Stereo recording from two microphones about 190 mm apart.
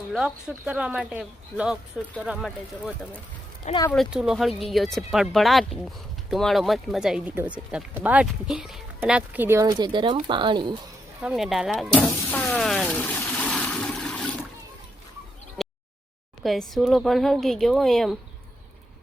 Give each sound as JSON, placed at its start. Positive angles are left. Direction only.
{"t": 0.1, "sound": "speech", "side_deg": 0}
{"t": 9.6, "sound": "speech", "side_deg": -25}
{"t": 11.2, "sound": "speech", "side_deg": -5}
{"t": 12.0, "sound": "a sound", "side_deg": 5}
{"t": 15.6, "sound": "a sound", "side_deg": 0}
{"t": 16.4, "sound": "speech", "side_deg": 0}